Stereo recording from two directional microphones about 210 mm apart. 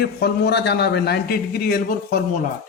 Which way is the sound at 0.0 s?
50° left (ahead or behind).